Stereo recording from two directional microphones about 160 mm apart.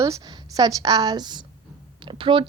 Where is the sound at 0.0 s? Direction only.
20° right (ahead or behind).